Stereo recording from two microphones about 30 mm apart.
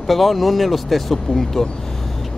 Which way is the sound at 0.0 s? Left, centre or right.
Centre.